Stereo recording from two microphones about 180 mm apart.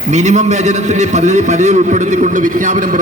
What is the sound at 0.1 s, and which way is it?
A man's voice, 40° right (ahead or behind).